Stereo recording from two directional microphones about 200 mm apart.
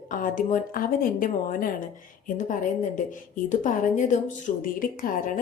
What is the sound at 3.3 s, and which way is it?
A woman's voice, 40° left (ahead or behind).